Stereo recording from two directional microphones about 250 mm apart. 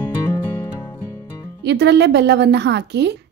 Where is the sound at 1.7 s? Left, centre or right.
Right.